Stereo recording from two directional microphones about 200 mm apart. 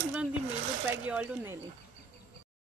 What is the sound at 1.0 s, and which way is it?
Speech, 10° right (ahead or behind).